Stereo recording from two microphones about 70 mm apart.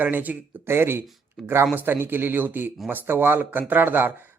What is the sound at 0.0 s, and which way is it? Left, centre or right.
Speech, right.